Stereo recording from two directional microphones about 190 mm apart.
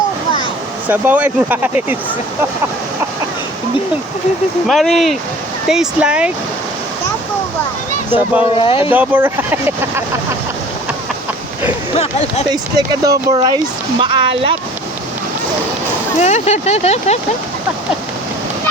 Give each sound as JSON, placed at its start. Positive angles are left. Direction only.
{"t": 0.9, "sound": "speech", "side_deg": -10}
{"t": 4.7, "sound": "speech", "side_deg": 0}
{"t": 8.5, "sound": "speech", "side_deg": 30}
{"t": 8.9, "sound": "speech", "side_deg": -10}
{"t": 12.5, "sound": "speech", "side_deg": -20}
{"t": 16.2, "sound": "speech", "side_deg": 35}